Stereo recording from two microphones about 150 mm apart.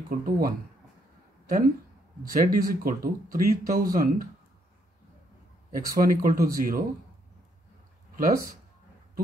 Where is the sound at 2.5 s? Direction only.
70° right (ahead or behind).